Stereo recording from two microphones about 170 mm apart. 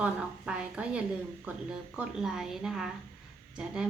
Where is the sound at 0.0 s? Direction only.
5° right (ahead or behind).